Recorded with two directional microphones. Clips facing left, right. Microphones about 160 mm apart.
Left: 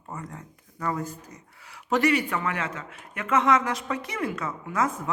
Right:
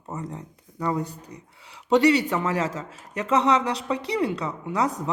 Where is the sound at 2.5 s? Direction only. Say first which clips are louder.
Right 5 dB; 35° right (ahead or behind).